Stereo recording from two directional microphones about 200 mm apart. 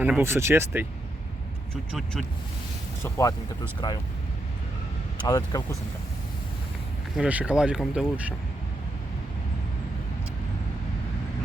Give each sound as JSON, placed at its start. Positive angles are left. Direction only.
{"t": 0.0, "sound": "speech", "side_deg": -10}
{"t": 3.0, "sound": "speech", "side_deg": 15}
{"t": 5.2, "sound": "speech", "side_deg": 20}
{"t": 7.2, "sound": "speech", "side_deg": -5}